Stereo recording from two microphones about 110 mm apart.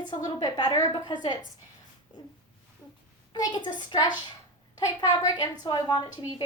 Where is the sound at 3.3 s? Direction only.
40° left (ahead or behind).